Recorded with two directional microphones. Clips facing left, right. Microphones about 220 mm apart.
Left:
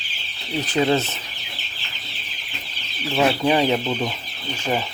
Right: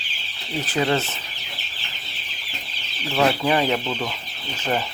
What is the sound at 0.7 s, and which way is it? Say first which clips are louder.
Speech: left 3 dB; 20° left (ahead or behind).